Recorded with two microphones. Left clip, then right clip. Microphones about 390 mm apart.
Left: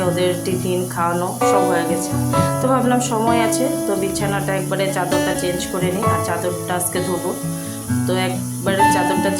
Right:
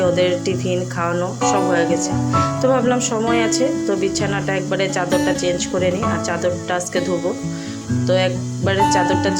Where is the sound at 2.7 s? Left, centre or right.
Left.